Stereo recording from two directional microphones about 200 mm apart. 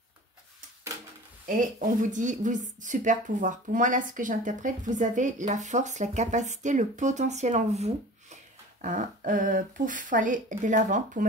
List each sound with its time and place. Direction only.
1.8 s a woman's voice: 40° right (ahead or behind)